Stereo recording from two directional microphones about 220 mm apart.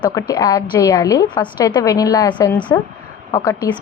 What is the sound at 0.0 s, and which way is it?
A woman's voice, 15° left (ahead or behind).